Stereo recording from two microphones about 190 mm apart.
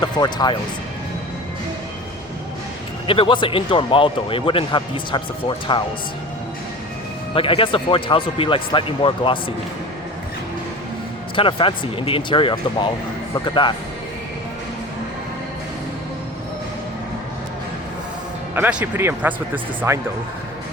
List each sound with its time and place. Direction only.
0.0 s speech: 20° left (ahead or behind)
3.1 s speech: 25° left (ahead or behind)
7.3 s speech: 30° left (ahead or behind)
11.3 s speech: 30° left (ahead or behind)
18.5 s speech: 10° right (ahead or behind)